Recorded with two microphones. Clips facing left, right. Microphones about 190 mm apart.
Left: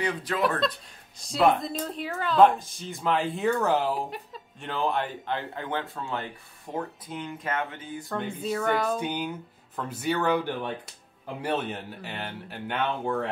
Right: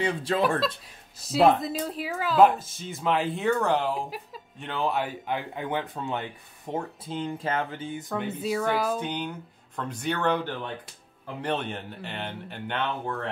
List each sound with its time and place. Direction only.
0.0 s speech: 25° right (ahead or behind)
1.2 s speech: 5° right (ahead or behind); by 8.1 s 25° right (ahead or behind)
8.1 s speech: 5° right (ahead or behind)
9.0 s speech: 10° left (ahead or behind)